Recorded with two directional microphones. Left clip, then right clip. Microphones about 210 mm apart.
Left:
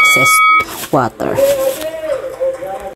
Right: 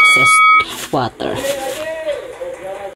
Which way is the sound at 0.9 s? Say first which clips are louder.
Left 5 dB; 15° left (ahead or behind).